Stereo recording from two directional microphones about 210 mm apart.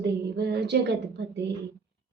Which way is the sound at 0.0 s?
50° right (ahead or behind).